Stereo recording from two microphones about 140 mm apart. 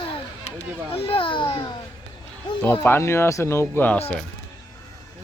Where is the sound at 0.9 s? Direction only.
40° left (ahead or behind).